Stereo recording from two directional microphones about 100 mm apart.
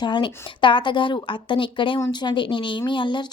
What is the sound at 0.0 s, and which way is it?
A woman's voice, 50° left (ahead or behind).